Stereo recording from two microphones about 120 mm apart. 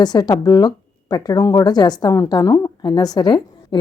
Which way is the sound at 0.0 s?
35° left (ahead or behind).